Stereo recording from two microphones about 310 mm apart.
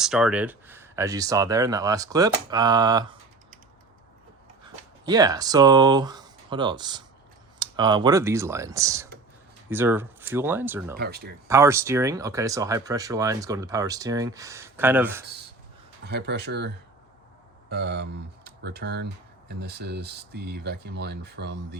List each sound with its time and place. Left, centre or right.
0.0 s speech: centre
5.0 s speech: centre
10.9 s speech: right
11.4 s speech: centre
16.0 s speech: right